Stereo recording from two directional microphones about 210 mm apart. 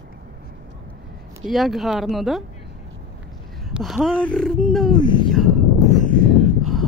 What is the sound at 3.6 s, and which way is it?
Speech, centre (ahead or behind).